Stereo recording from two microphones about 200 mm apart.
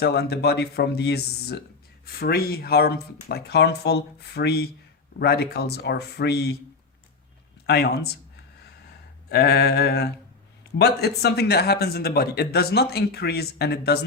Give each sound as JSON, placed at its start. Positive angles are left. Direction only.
{"t": 0.0, "sound": "speech", "side_deg": 55}
{"t": 7.7, "sound": "speech", "side_deg": 55}
{"t": 9.3, "sound": "speech", "side_deg": 55}